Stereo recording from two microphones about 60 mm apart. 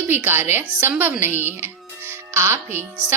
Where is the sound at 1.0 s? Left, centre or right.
Right.